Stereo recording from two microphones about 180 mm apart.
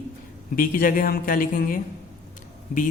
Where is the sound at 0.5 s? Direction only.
50° left (ahead or behind).